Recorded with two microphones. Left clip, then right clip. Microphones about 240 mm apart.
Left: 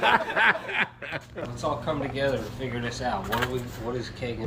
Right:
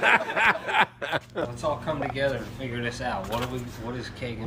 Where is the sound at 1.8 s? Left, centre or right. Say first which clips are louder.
Even; centre.